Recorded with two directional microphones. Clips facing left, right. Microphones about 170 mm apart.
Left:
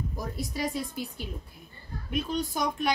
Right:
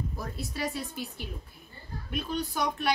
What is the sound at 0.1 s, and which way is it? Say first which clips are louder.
Speech: left 3 dB; 15° left (ahead or behind).